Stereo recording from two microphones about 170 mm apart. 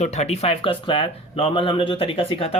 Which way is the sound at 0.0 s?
40° left (ahead or behind).